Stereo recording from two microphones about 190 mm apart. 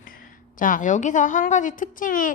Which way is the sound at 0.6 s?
45° left (ahead or behind).